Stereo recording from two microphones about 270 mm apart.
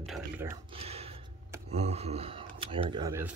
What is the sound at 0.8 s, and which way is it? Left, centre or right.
Gasp, right.